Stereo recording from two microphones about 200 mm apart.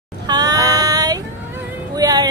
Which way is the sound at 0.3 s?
20° right (ahead or behind).